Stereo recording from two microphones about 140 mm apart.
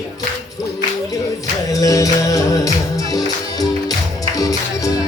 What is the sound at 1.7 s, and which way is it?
Music, 25° left (ahead or behind).